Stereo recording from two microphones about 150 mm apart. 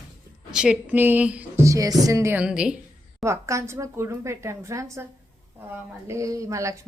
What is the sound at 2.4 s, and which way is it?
Speech, 5° right (ahead or behind).